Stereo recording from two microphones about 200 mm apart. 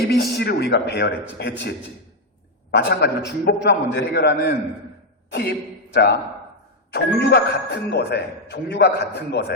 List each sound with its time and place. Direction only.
0.1 s speech: 55° left (ahead or behind)
2.7 s a man's voice: 55° left (ahead or behind)